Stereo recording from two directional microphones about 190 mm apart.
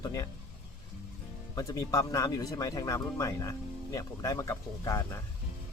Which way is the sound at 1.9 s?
20° left (ahead or behind).